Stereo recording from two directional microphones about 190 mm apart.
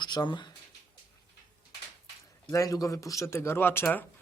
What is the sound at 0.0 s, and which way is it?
Speech, 25° left (ahead or behind).